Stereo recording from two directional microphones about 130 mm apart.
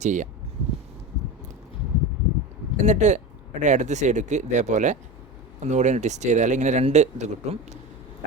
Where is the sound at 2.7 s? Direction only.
65° right (ahead or behind).